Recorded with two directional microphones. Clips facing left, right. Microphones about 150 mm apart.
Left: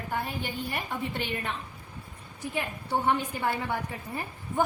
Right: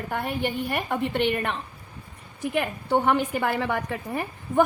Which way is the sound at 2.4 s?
80° right.